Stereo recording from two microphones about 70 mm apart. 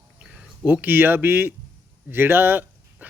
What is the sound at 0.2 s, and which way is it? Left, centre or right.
Speech, centre.